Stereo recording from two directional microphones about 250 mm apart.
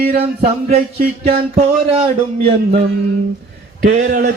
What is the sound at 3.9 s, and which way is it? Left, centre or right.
Mantra, right.